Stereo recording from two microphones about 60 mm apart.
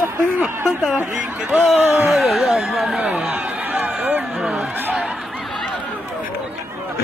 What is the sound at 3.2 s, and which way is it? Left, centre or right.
Chatter, centre.